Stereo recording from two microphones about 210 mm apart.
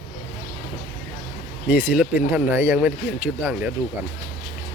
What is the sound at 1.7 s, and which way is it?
Speech, 10° right (ahead or behind).